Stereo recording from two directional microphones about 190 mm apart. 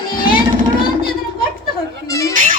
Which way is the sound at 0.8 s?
50° left (ahead or behind).